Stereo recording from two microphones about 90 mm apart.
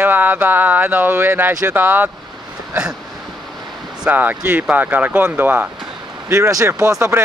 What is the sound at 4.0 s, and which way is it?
Speech, 20° right (ahead or behind).